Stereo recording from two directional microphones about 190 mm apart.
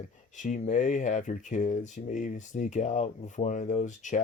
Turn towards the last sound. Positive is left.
turn(degrees=40)  # may be behind; listen again after turning